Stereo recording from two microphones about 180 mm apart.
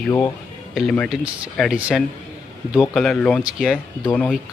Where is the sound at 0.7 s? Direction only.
Centre (ahead or behind).